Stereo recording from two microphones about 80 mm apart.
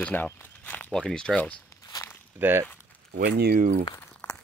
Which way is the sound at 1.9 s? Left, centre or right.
Left.